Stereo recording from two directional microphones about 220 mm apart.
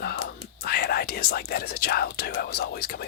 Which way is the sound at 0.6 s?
45° left (ahead or behind).